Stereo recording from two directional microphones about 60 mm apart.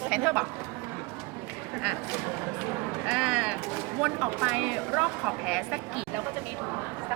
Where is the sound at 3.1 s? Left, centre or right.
Centre.